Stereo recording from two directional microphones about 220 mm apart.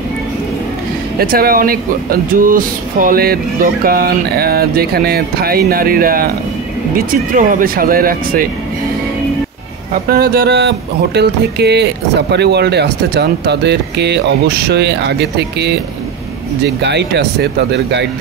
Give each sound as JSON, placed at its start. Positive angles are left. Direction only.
{"t": 1.1, "sound": "speech", "side_deg": -40}
{"t": 10.0, "sound": "speech", "side_deg": -45}